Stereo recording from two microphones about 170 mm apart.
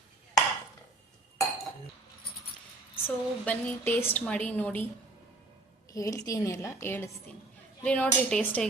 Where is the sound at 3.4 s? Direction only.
10° left (ahead or behind).